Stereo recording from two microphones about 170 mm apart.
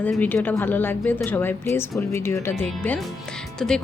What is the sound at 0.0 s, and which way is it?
Speech, 10° left (ahead or behind).